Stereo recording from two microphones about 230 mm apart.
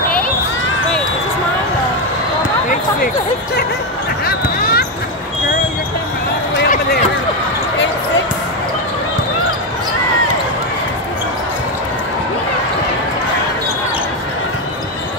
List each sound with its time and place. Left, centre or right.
4.3 s basketball bounce: left